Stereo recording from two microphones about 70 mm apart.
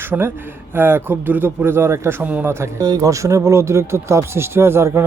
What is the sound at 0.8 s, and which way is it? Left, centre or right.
Speech, right.